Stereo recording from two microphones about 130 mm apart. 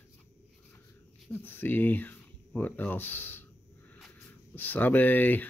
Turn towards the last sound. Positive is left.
turn(degrees=15)  # may be behind; listen again after turning